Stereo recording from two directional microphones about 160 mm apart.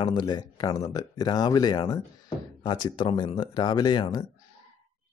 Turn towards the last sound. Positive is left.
turn(degrees=25)  # may be behind; listen again after turning